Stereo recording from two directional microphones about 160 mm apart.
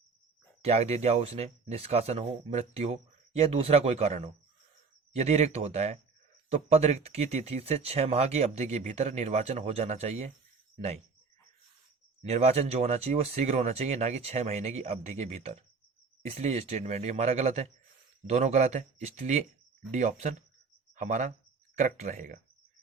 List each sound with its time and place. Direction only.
0.6 s speech: 40° right (ahead or behind)
12.2 s a man's voice: 40° right (ahead or behind)